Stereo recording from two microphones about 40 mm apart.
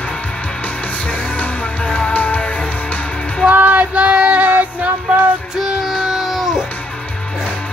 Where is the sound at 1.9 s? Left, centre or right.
Left.